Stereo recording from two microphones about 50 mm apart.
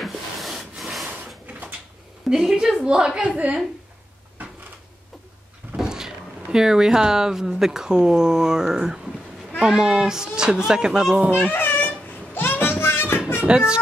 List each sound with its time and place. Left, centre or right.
0.0 s wood: centre
2.2 s speech: centre
3.2 s a woman's voice: right
5.8 s speech: centre
11.5 s a sound: left
12.4 s music: left
13.4 s speech: right